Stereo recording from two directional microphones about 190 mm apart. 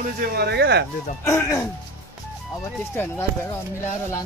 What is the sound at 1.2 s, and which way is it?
Speech, 15° left (ahead or behind).